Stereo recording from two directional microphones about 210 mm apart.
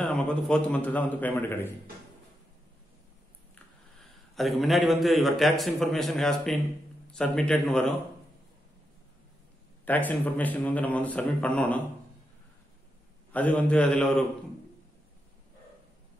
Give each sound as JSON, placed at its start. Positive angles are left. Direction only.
{"t": 0.0, "sound": "a man's voice", "side_deg": 5}
{"t": 4.0, "sound": "a man's voice", "side_deg": 0}
{"t": 9.8, "sound": "a man's voice", "side_deg": 10}
{"t": 13.3, "sound": "a man's voice", "side_deg": 5}